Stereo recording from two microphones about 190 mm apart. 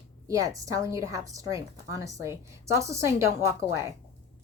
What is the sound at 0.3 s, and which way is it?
A woman's voice, 20° right (ahead or behind).